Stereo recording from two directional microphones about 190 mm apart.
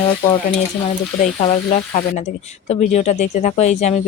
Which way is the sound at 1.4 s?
35° left (ahead or behind).